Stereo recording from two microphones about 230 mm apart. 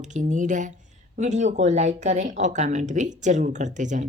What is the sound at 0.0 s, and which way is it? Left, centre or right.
A woman's voice, right.